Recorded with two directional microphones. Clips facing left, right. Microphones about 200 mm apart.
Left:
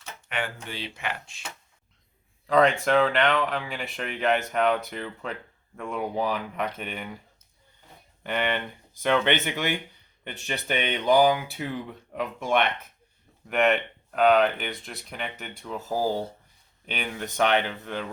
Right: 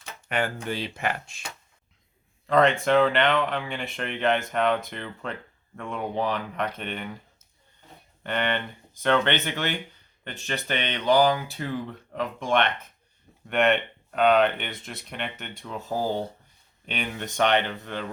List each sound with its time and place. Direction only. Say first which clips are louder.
0.3 s speech: right 5 dB; 40° right (ahead or behind)
2.5 s speech: even; centre (ahead or behind)
8.2 s speech: even; 10° left (ahead or behind)